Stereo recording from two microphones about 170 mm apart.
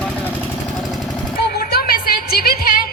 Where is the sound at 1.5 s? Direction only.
65° left (ahead or behind).